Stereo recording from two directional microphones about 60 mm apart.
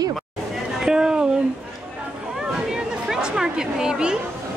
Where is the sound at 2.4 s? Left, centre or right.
Centre.